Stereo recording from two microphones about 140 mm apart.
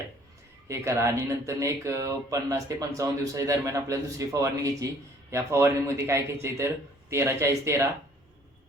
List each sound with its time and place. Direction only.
0.7 s speech: 20° right (ahead or behind)